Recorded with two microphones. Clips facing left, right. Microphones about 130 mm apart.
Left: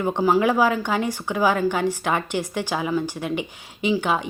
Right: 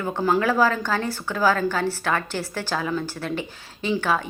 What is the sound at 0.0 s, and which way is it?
Speech, 20° left (ahead or behind).